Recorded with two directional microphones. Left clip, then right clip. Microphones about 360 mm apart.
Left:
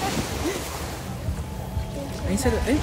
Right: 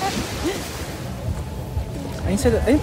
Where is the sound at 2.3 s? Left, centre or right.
Centre.